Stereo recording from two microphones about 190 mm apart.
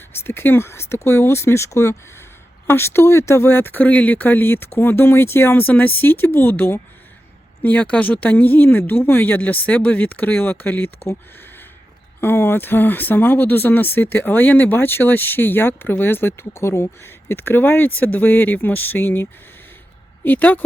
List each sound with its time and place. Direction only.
0.1 s speech: 10° left (ahead or behind)
12.2 s speech: 10° left (ahead or behind)